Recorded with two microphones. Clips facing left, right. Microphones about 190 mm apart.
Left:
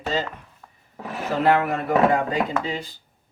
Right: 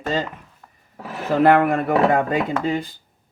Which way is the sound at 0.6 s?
Centre (ahead or behind).